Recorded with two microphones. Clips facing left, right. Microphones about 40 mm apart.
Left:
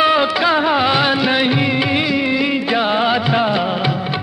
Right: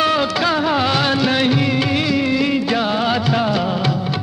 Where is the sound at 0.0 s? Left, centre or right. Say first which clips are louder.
Left 3 dB; centre.